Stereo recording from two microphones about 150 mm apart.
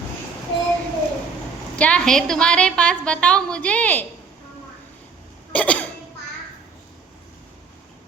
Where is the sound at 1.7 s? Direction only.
5° left (ahead or behind).